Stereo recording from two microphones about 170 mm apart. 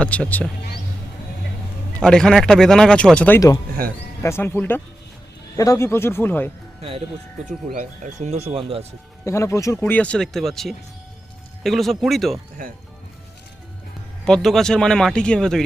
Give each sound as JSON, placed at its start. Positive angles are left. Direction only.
{"t": 0.0, "sound": "speech", "side_deg": 5}
{"t": 2.0, "sound": "speech", "side_deg": 5}
{"t": 7.4, "sound": "speech", "side_deg": -45}
{"t": 9.2, "sound": "speech", "side_deg": 15}
{"t": 12.6, "sound": "speech", "side_deg": -55}
{"t": 14.3, "sound": "speech", "side_deg": 5}